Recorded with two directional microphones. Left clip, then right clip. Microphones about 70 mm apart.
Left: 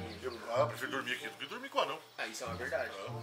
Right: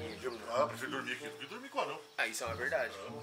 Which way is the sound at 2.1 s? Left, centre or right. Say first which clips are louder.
Right 4 dB; right.